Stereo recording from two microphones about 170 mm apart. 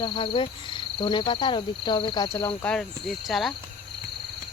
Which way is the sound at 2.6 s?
Centre (ahead or behind).